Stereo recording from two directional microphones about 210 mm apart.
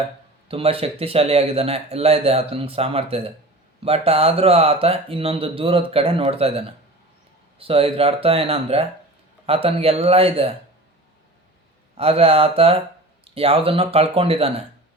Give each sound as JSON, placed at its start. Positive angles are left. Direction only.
{"t": 0.4, "sound": "speech", "side_deg": -25}
{"t": 11.9, "sound": "speech", "side_deg": -30}